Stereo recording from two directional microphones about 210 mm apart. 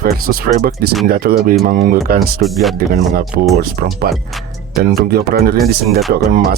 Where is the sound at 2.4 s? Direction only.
Centre (ahead or behind).